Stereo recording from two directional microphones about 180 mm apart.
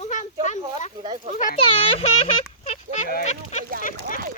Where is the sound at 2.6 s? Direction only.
35° left (ahead or behind).